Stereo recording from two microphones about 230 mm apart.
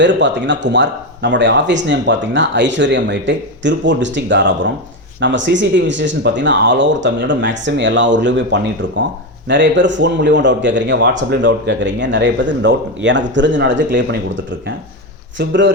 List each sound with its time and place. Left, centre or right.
0.0 s speech: right
15.4 s speech: right